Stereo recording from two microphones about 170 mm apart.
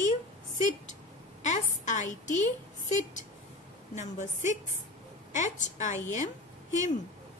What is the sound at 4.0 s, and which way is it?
A woman's voice, 45° left (ahead or behind).